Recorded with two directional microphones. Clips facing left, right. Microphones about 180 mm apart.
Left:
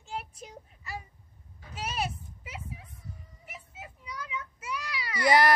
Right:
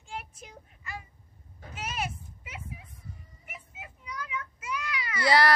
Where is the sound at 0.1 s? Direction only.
35° left (ahead or behind).